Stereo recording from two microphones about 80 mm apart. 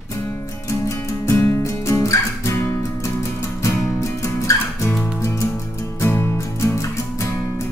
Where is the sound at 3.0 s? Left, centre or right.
Left.